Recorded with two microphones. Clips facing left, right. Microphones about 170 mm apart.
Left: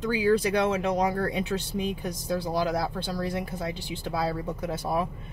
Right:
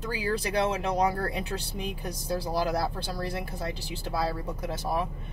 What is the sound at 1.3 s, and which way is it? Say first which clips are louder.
Speech: left 5 dB; centre (ahead or behind).